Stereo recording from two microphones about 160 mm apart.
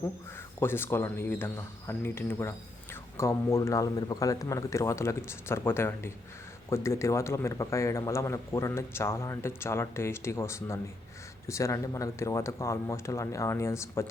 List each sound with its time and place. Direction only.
0.6 s speech: 15° left (ahead or behind)